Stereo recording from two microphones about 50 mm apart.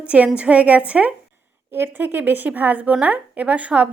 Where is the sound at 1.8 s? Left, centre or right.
Right.